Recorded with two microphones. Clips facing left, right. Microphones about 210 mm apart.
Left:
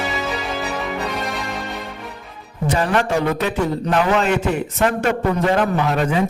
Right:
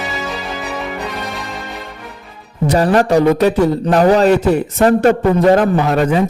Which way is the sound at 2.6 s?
35° right (ahead or behind).